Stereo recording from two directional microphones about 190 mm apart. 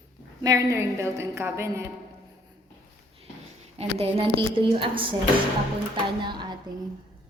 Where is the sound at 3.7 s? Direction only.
30° right (ahead or behind).